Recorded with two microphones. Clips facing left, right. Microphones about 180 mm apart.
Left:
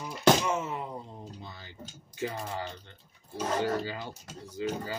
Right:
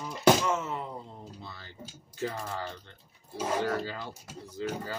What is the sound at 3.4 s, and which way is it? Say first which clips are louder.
Speech: even; 10° right (ahead or behind).